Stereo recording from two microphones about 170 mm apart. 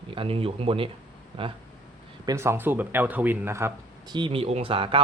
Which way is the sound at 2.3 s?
15° right (ahead or behind).